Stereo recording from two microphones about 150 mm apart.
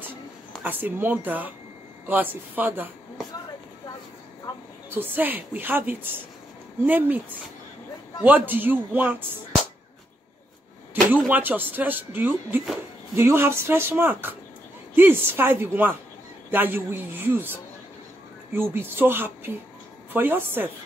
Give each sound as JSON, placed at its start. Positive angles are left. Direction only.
{"t": 0.7, "sound": "speech", "side_deg": -15}
{"t": 4.8, "sound": "speech", "side_deg": -15}
{"t": 8.2, "sound": "speech", "side_deg": -10}
{"t": 11.1, "sound": "speech", "side_deg": -10}